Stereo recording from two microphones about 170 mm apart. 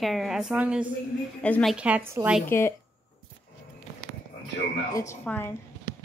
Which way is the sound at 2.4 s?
15° left (ahead or behind).